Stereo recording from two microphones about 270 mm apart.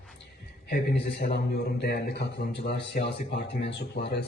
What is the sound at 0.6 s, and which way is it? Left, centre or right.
A man's voice, left.